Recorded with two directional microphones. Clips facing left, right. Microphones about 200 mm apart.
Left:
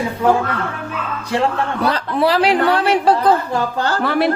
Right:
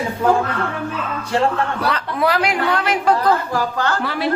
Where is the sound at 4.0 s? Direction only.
50° left (ahead or behind).